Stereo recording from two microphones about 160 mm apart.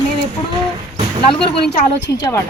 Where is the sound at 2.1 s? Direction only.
20° left (ahead or behind).